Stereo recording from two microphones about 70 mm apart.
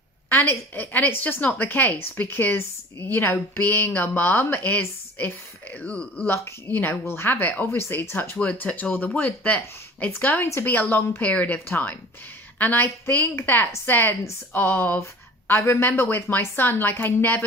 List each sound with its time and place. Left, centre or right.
0.3 s a woman's voice: left
6.2 s a woman's voice: left